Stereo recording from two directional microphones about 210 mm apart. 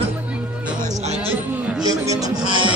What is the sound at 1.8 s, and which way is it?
Speech, 15° right (ahead or behind).